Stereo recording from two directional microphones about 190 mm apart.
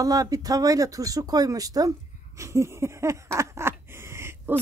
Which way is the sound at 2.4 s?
15° right (ahead or behind).